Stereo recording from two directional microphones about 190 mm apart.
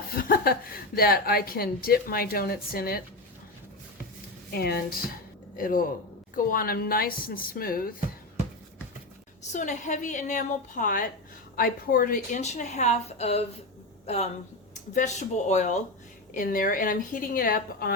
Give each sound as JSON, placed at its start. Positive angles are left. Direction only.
{"t": 0.2, "sound": "a woman's voice", "side_deg": 50}
{"t": 4.5, "sound": "a woman's voice", "side_deg": 55}
{"t": 9.5, "sound": "a woman's voice", "side_deg": 40}
{"t": 14.9, "sound": "a woman's voice", "side_deg": 35}